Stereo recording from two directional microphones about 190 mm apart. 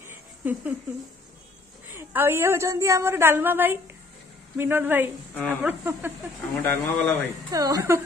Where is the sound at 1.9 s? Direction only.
10° right (ahead or behind).